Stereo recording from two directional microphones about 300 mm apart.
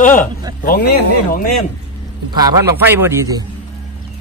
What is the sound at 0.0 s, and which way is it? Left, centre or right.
Speech, left.